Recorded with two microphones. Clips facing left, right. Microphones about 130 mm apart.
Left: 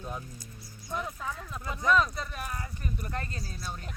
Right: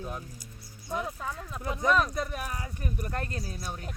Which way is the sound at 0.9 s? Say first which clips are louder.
Right 2 dB; 25° right (ahead or behind).